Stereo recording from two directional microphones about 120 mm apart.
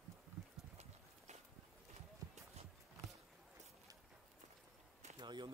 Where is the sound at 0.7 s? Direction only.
70° right (ahead or behind).